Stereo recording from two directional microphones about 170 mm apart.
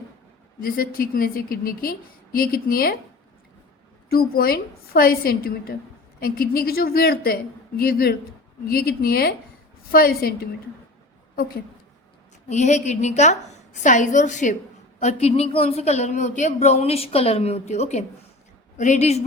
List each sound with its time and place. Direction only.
0.6 s a woman's voice: 60° left (ahead or behind)
4.1 s a woman's voice: 60° left (ahead or behind)
12.5 s a woman's voice: 45° left (ahead or behind)
14.9 s speech: 35° left (ahead or behind)